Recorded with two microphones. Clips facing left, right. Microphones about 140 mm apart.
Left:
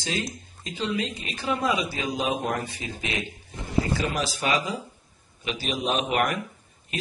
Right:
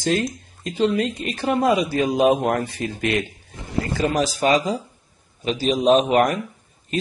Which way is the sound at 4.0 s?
40° right (ahead or behind).